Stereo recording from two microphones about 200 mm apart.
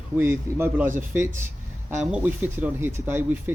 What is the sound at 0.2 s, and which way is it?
Speech, 10° right (ahead or behind).